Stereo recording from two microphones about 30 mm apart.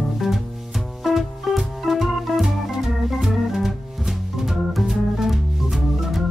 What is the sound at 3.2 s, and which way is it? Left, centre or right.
Organ, centre.